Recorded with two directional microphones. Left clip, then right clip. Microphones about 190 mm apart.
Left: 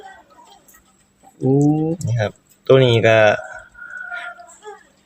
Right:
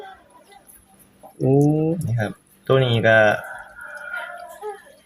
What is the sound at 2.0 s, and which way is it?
Speech, 50° left (ahead or behind).